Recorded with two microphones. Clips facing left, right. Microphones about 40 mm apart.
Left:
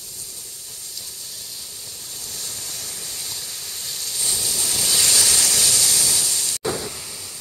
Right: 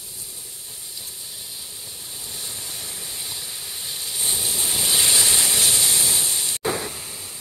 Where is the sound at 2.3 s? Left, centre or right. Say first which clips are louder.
Even; centre.